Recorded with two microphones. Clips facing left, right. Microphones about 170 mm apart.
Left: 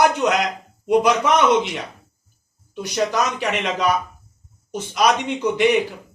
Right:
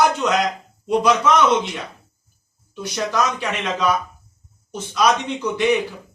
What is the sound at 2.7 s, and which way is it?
A man's voice, 15° left (ahead or behind).